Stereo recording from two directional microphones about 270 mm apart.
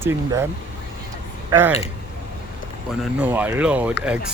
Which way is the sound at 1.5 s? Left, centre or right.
Centre.